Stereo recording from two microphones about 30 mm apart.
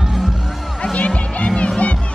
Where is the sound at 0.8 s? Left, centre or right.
Left.